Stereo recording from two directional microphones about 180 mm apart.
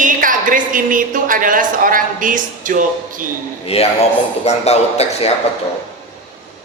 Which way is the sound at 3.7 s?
35° left (ahead or behind).